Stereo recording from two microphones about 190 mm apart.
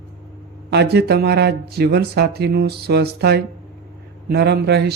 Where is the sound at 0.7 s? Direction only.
60° right (ahead or behind).